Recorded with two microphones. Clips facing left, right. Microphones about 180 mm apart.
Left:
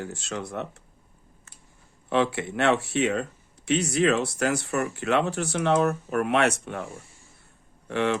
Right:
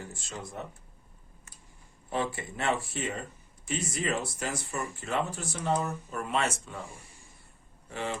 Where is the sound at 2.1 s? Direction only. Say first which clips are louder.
Left 8 dB; 75° left (ahead or behind).